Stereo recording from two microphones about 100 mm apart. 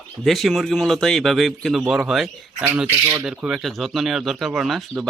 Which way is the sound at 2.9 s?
25° right (ahead or behind).